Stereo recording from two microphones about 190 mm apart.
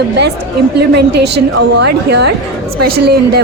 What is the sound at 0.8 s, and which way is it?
Speech, 60° right (ahead or behind).